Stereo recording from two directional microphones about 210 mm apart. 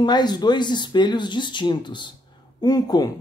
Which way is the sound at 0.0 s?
20° left (ahead or behind).